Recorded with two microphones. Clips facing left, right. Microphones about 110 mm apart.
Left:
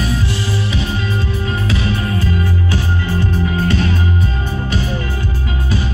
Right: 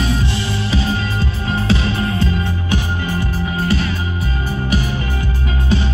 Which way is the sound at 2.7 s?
15° right (ahead or behind).